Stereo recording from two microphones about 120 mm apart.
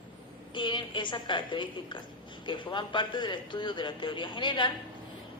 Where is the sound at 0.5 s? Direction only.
40° left (ahead or behind).